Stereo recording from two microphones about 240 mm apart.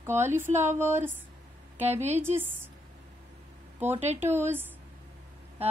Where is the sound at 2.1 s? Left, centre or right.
Centre.